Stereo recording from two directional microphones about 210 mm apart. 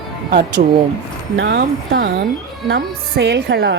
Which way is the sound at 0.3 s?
40° right (ahead or behind).